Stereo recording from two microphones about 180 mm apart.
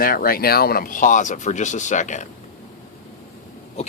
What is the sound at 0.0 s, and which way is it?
Speech, 55° left (ahead or behind).